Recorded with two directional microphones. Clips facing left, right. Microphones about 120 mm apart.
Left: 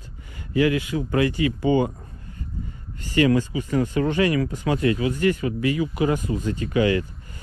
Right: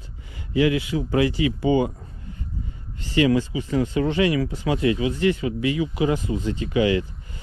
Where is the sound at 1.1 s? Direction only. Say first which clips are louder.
Right 1 dB; 45° left (ahead or behind).